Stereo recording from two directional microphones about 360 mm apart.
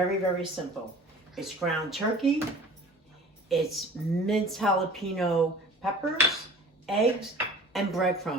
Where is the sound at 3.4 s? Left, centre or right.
Centre.